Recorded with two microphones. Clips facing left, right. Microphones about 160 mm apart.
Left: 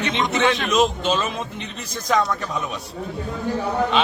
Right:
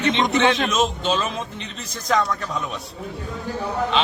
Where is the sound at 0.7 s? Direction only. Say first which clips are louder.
Left 2 dB; centre (ahead or behind).